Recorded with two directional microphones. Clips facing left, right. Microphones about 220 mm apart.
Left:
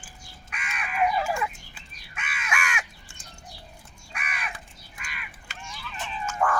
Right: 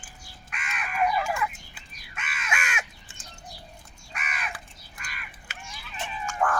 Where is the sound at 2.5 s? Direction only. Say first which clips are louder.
Left 1 dB; 20° right (ahead or behind).